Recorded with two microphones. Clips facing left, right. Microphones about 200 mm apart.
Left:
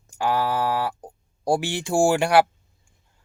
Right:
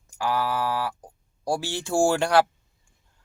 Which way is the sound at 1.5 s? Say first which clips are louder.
Left 4 dB; 15° left (ahead or behind).